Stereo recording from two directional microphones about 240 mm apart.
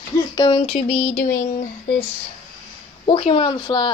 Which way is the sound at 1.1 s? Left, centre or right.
Left.